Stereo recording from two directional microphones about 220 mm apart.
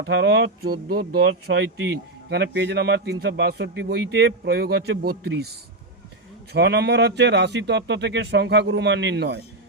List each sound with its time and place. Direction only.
0.0 s speech: 50° right (ahead or behind)